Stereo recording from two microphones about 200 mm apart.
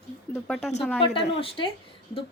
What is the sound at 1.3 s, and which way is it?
Speech, 25° left (ahead or behind).